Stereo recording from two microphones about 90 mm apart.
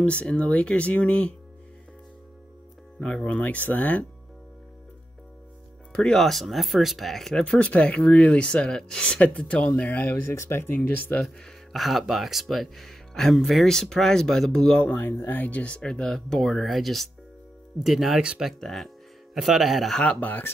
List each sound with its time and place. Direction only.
0.0 s speech: 10° left (ahead or behind)
3.0 s speech: 10° left (ahead or behind)
5.9 s speech: 5° left (ahead or behind)
9.8 s speech: 20° left (ahead or behind)
11.2 s speech: centre (ahead or behind)
20.0 s speech: 15° left (ahead or behind)